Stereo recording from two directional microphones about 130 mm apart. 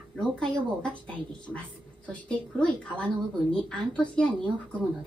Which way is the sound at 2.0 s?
10° left (ahead or behind).